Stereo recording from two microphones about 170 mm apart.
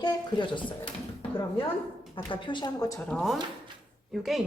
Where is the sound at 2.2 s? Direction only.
30° left (ahead or behind).